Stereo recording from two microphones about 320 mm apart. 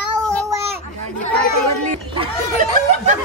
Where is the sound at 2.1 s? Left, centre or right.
Centre.